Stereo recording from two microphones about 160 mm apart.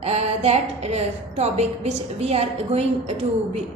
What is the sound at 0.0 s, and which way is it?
A woman's voice, 40° right (ahead or behind).